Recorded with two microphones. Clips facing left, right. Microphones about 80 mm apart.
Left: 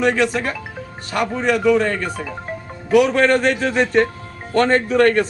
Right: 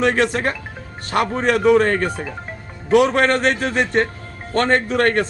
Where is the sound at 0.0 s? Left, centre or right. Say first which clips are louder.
Even; right.